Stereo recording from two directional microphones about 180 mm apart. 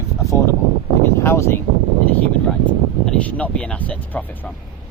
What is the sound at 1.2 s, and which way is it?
Speech, 15° left (ahead or behind).